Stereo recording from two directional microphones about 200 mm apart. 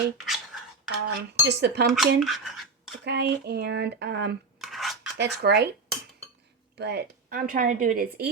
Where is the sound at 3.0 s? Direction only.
55° right (ahead or behind).